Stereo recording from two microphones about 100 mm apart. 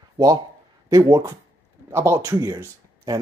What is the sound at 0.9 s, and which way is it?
Speech, 35° right (ahead or behind).